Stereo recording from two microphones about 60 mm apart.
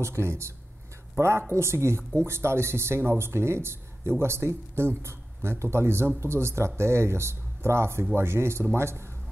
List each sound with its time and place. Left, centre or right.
0.0 s speech: right